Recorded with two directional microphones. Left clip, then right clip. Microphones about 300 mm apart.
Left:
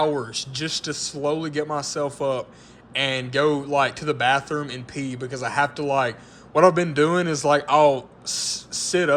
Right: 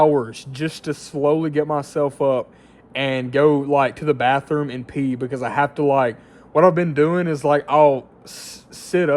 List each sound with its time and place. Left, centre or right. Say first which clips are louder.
0.0 s speech: right 7 dB; centre